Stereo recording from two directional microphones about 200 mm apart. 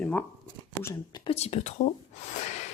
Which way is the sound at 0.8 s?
20° left (ahead or behind).